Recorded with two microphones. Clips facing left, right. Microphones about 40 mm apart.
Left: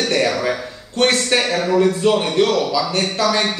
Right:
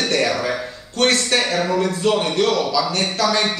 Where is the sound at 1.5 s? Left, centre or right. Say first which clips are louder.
Left 3 dB; centre.